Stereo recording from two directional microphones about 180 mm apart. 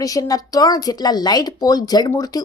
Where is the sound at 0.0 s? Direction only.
20° left (ahead or behind).